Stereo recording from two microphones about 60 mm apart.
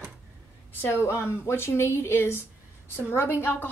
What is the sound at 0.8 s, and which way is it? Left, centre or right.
Speech, left.